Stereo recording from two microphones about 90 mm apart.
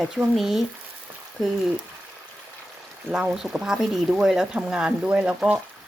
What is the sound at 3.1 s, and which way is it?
Speech, 15° right (ahead or behind).